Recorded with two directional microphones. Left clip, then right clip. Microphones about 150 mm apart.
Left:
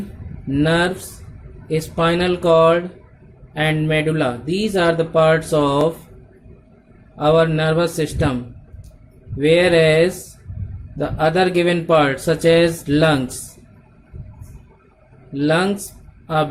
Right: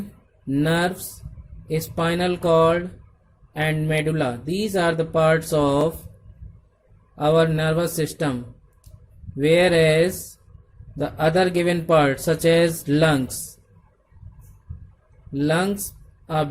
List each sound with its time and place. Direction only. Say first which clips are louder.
0.5 s speech: left 4 dB; 55° right (ahead or behind)
7.2 s speech: left 4 dB; 55° right (ahead or behind)
9.4 s speech: left 3 dB; 55° right (ahead or behind)
15.3 s speech: left 4 dB; 50° right (ahead or behind)